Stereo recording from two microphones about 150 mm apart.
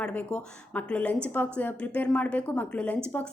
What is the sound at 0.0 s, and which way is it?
A woman's voice, 10° left (ahead or behind).